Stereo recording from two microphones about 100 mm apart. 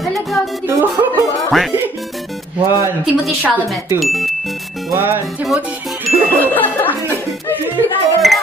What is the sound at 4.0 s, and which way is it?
Speech, centre (ahead or behind).